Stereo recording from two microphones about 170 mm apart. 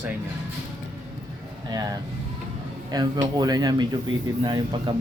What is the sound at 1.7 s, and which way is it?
Speech, 25° right (ahead or behind).